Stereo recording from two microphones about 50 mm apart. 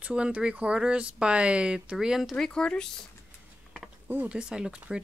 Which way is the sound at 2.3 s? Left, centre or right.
Centre.